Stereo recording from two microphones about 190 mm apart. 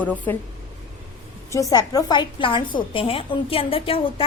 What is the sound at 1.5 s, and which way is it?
A woman's voice, 20° left (ahead or behind).